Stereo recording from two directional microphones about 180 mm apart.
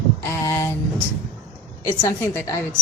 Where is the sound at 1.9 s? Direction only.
15° left (ahead or behind).